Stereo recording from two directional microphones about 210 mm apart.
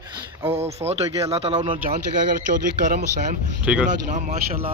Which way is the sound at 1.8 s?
40° right (ahead or behind).